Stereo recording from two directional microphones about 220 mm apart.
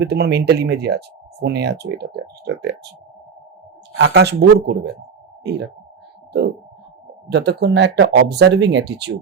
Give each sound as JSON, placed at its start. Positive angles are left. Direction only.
{"t": 0.0, "sound": "speech", "side_deg": -50}
{"t": 3.9, "sound": "speech", "side_deg": -50}
{"t": 7.3, "sound": "speech", "side_deg": -50}